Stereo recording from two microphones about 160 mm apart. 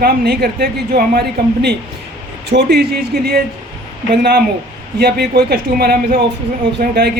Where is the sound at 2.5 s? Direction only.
80° right.